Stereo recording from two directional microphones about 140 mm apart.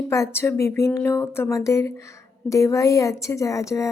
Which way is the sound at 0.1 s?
20° left (ahead or behind).